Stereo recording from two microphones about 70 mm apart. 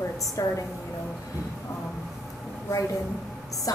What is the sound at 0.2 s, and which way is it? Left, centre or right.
Speech, left.